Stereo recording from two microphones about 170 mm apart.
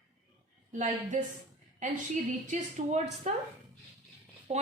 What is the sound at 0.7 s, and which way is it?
A woman's voice, 45° right (ahead or behind).